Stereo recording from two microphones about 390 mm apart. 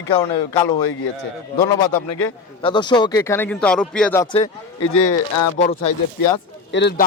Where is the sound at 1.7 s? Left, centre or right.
Centre.